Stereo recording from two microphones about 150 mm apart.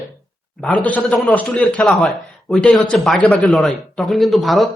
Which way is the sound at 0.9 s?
5° left (ahead or behind).